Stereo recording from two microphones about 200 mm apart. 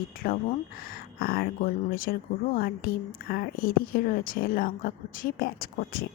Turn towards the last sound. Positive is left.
turn(degrees=45)  # may be behind; listen again after turning